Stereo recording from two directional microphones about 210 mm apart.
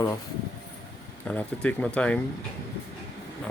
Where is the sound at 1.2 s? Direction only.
5° left (ahead or behind).